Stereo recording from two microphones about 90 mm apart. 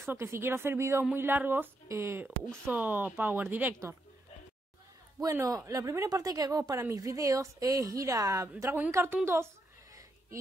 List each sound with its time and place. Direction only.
0.0 s speech: 30° right (ahead or behind)
5.2 s speech: 40° right (ahead or behind)
8.9 s speech: 25° right (ahead or behind)